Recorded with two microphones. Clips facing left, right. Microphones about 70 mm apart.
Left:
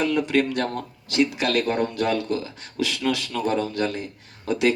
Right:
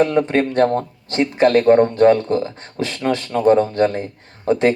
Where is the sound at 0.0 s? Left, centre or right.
Right.